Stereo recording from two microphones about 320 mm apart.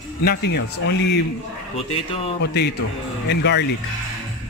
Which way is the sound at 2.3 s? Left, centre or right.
Left.